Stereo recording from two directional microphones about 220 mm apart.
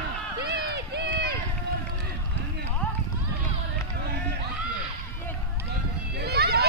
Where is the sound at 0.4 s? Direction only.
50° right (ahead or behind).